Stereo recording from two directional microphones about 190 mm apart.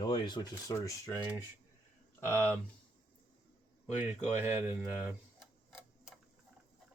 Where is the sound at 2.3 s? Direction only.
15° right (ahead or behind).